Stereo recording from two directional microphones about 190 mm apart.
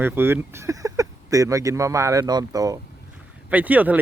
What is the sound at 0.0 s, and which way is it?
Speech, 10° right (ahead or behind).